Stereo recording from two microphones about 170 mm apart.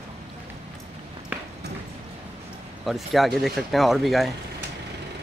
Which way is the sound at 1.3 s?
10° right (ahead or behind).